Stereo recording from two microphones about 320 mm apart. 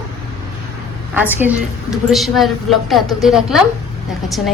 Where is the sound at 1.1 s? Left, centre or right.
Centre.